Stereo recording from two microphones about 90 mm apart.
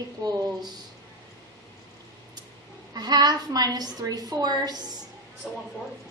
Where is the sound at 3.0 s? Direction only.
50° right (ahead or behind).